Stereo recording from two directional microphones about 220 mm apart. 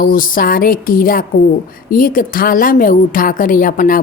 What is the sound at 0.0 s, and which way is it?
A woman's voice, 40° left (ahead or behind).